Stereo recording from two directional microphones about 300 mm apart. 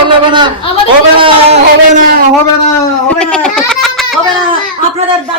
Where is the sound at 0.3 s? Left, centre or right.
Centre.